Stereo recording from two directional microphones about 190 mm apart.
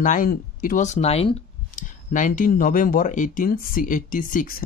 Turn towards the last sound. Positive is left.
turn(degrees=45)  # may be behind; listen again after turning